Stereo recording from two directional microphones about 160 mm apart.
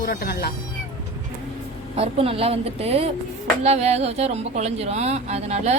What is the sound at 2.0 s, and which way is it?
A woman's voice, 40° right (ahead or behind).